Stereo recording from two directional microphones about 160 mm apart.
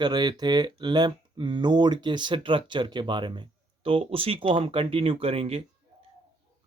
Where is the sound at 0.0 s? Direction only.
25° right (ahead or behind).